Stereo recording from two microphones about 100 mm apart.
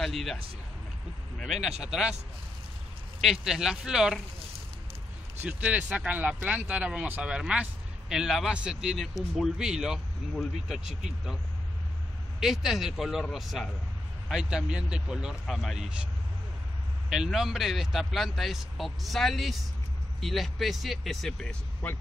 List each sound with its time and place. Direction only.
0.0 s speech: centre (ahead or behind)
1.4 s speech: 5° right (ahead or behind)
3.2 s speech: centre (ahead or behind)
5.4 s speech: 15° right (ahead or behind)
12.4 s speech: 5° right (ahead or behind)
17.1 s speech: 5° right (ahead or behind)